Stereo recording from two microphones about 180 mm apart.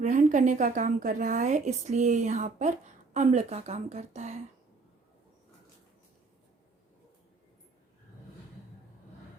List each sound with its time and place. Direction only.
0.0 s a woman's voice: 45° right (ahead or behind)